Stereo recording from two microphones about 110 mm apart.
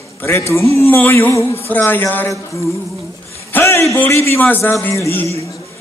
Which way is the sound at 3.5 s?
20° left (ahead or behind).